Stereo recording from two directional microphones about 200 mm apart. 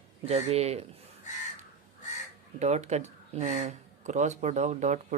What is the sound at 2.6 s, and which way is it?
Speech, 35° right (ahead or behind).